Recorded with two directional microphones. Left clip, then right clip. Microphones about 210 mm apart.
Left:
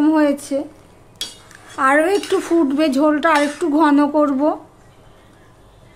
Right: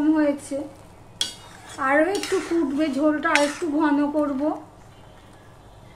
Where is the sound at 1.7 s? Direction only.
55° left (ahead or behind).